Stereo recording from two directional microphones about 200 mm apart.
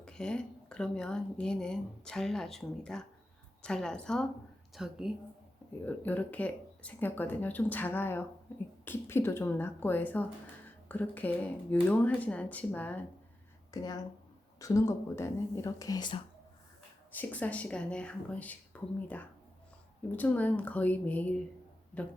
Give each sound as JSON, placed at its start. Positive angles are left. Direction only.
{"t": 0.0, "sound": "speech", "side_deg": 5}
{"t": 5.8, "sound": "speech", "side_deg": 10}
{"t": 13.7, "sound": "speech", "side_deg": 20}
{"t": 17.1, "sound": "speech", "side_deg": 10}